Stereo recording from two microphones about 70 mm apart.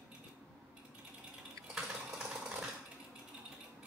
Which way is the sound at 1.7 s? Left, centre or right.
Centre.